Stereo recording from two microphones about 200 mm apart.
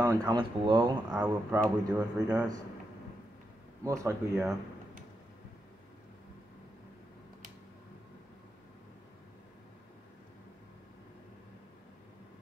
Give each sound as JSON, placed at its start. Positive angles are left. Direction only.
{"t": 0.0, "sound": "speech", "side_deg": -15}
{"t": 1.1, "sound": "speech", "side_deg": -10}
{"t": 3.8, "sound": "speech", "side_deg": -15}